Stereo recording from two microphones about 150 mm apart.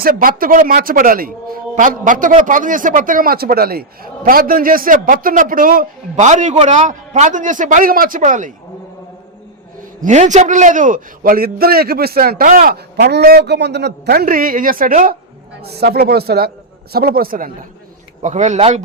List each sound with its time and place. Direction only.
0.0 s speech: 70° right (ahead or behind)
10.0 s a man's voice: 55° right (ahead or behind)
15.6 s speech: 90° right; by 17.7 s 65° right (ahead or behind)
18.2 s a man's voice: 55° right (ahead or behind)